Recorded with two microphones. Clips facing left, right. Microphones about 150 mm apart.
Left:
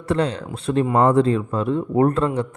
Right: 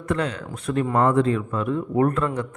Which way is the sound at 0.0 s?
30° left (ahead or behind).